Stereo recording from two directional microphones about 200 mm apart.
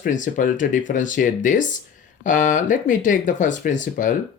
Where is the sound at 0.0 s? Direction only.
40° left (ahead or behind).